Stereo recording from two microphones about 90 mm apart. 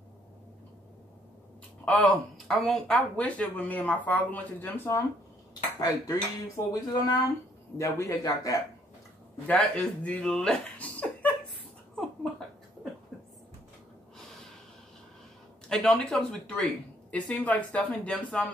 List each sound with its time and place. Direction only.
2.3 s speech: 5° left (ahead or behind); by 4.9 s 20° left (ahead or behind)
5.5 s cutlery: 40° left (ahead or behind)
7.7 s cutlery: 35° left (ahead or behind)
9.5 s speech: 15° left (ahead or behind)
11.9 s a sound: 5° left (ahead or behind)
15.7 s speech: 5° left (ahead or behind)